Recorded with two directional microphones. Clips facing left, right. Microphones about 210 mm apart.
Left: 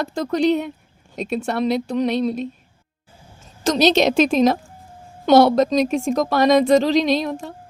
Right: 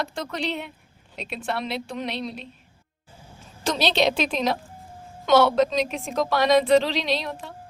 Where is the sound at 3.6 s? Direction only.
45° left (ahead or behind).